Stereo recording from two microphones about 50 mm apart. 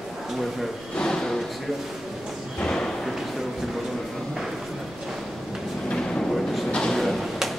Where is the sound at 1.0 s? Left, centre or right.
Centre.